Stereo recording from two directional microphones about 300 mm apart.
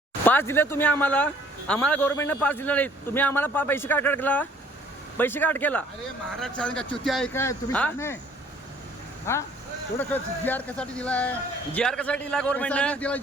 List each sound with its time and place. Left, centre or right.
0.3 s a man's voice: centre
9.3 s a man's voice: centre